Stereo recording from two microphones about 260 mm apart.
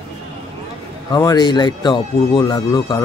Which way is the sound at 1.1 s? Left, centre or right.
Centre.